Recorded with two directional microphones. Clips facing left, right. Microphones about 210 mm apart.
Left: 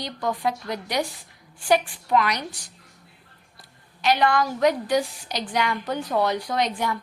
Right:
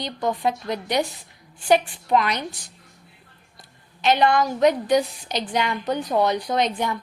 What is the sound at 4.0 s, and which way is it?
A woman's voice, 20° right (ahead or behind).